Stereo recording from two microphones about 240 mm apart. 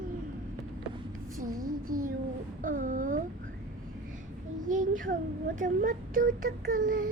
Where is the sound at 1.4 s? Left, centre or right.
Right.